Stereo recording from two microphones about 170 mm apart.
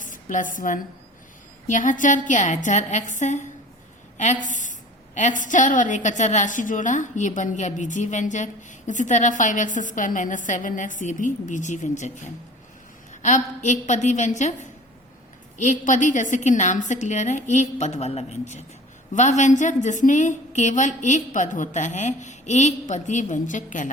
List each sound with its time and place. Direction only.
0.0 s a sound: 50° left (ahead or behind)
0.5 s a woman's voice: 50° left (ahead or behind)
13.2 s a woman's voice: 45° left (ahead or behind)